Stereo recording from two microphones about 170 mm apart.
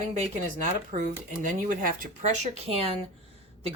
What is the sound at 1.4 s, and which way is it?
A woman's voice, 50° right (ahead or behind).